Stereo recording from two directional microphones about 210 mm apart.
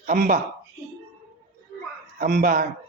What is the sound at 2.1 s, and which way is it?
Speech, 45° right (ahead or behind).